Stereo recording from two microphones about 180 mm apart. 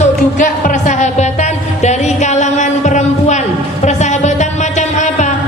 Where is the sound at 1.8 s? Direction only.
40° left (ahead or behind).